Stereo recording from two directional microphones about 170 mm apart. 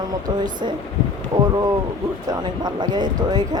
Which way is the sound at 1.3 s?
20° right (ahead or behind).